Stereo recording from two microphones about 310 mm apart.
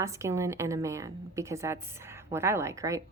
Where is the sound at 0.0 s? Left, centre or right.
Centre.